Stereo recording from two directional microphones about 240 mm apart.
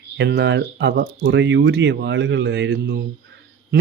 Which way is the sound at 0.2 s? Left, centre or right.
Right.